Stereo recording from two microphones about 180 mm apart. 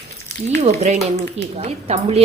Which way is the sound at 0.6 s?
35° right (ahead or behind).